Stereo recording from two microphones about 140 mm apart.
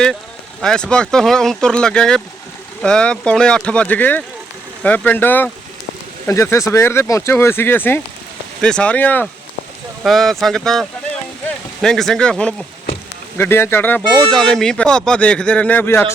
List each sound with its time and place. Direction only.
0.6 s speech: 5° left (ahead or behind)
10.0 s speech: centre (ahead or behind)
13.3 s speech: 15° left (ahead or behind)